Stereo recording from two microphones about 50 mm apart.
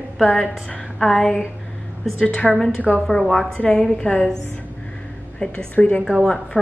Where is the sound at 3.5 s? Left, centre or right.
Left.